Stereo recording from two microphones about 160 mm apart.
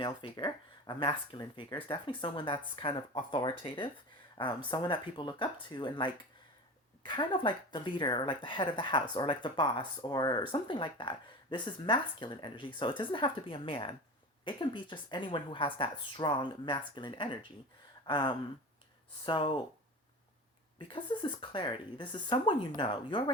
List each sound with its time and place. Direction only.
0.0 s speech: 30° left (ahead or behind)
18.0 s a sound: 30° left (ahead or behind)
19.2 s speech: 35° left (ahead or behind)
20.9 s speech: 30° left (ahead or behind)